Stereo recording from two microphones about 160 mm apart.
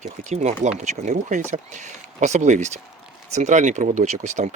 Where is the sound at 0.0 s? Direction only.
50° right (ahead or behind).